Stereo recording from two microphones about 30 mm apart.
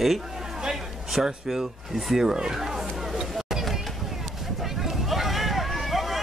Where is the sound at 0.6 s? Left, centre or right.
Centre.